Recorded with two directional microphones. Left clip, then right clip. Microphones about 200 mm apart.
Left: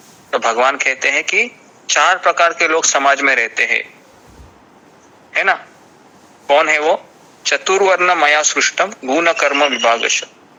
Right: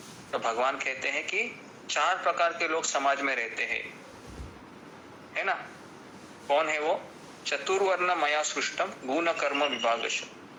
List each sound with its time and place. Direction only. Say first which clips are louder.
0.3 s a man's voice: left 14 dB; 45° left (ahead or behind)
5.3 s a man's voice: left 15 dB; 45° left (ahead or behind)